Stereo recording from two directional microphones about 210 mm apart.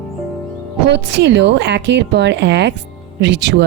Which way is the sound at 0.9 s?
55° right (ahead or behind).